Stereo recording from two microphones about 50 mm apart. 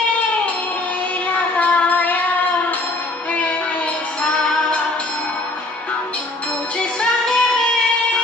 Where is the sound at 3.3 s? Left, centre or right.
Left.